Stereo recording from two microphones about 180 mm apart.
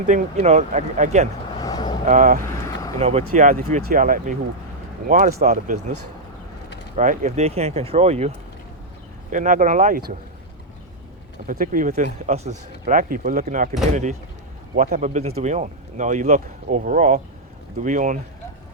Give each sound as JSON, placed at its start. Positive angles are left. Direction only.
{"t": 0.0, "sound": "speech", "side_deg": -45}
{"t": 1.6, "sound": "vehicle", "side_deg": 20}
{"t": 2.0, "sound": "speech", "side_deg": -45}
{"t": 2.4, "sound": "vehicle", "side_deg": 15}
{"t": 3.0, "sound": "speech", "side_deg": -35}
{"t": 3.8, "sound": "speech", "side_deg": -50}
{"t": 6.9, "sound": "speech", "side_deg": -45}
{"t": 9.3, "sound": "speech", "side_deg": -45}
{"t": 11.4, "sound": "speech", "side_deg": -50}